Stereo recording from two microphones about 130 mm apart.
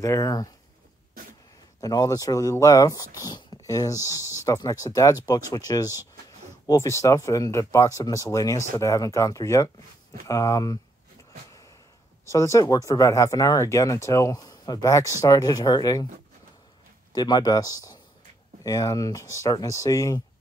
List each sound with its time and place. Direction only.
0.0 s speech: 25° left (ahead or behind)
1.8 s speech: 30° left (ahead or behind)
4.1 s speech: 20° right (ahead or behind)
4.5 s speech: 25° left (ahead or behind)
12.3 s speech: 25° left (ahead or behind)
17.1 s speech: 30° left (ahead or behind)